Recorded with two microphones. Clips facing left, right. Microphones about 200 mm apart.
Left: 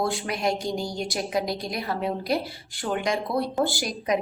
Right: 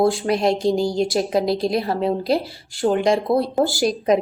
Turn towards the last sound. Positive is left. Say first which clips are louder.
# right 8 dB
turn(degrees=-30)  # may be behind; listen again after turning